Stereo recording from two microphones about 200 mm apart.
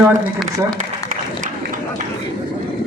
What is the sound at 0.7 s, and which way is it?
Applause, 40° right (ahead or behind).